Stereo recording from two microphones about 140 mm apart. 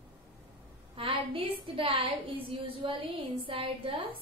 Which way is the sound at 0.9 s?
40° right (ahead or behind).